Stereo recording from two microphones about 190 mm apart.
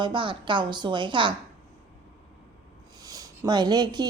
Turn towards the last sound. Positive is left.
turn(degrees=-20)  # may be behind; listen again after turning